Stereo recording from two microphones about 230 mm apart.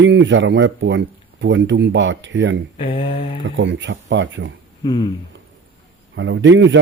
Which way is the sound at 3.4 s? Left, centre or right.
Right.